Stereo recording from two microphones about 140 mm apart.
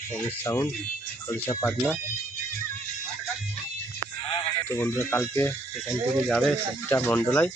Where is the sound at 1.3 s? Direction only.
20° left (ahead or behind).